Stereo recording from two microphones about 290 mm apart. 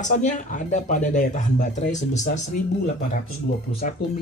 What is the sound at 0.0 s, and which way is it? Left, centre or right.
Speech, left.